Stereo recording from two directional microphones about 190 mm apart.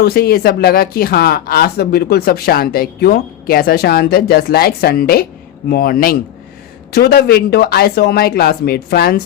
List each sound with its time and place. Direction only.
0.0 s a woman's voice: 55° left (ahead or behind)